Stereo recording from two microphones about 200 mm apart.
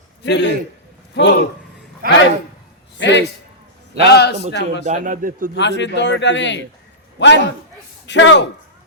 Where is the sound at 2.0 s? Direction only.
45° right (ahead or behind).